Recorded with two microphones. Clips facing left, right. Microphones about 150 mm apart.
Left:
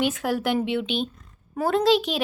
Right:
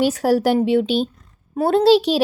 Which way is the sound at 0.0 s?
40° right (ahead or behind).